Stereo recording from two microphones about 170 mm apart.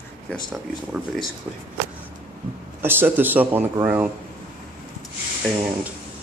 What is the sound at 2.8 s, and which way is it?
A man's voice, 10° right (ahead or behind).